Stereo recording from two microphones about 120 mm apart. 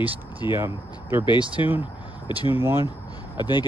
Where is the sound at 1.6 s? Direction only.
45° left (ahead or behind).